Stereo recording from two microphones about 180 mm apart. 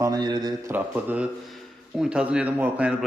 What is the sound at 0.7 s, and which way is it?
Speech, 10° right (ahead or behind).